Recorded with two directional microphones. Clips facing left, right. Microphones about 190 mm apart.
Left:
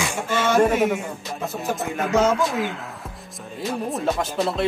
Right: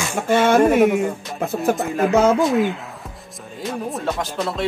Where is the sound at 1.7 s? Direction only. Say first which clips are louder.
Right 1 dB; centre (ahead or behind).